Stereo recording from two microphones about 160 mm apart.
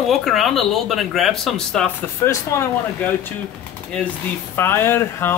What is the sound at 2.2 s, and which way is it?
Speech, 15° left (ahead or behind).